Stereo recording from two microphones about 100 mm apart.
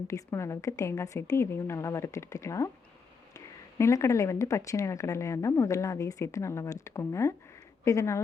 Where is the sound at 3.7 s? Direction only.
30° left (ahead or behind).